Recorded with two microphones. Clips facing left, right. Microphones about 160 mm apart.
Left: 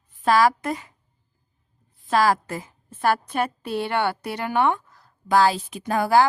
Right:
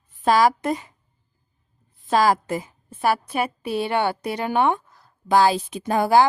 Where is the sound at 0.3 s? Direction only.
20° right (ahead or behind).